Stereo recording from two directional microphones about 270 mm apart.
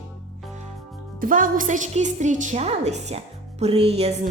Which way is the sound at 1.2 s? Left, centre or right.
Right.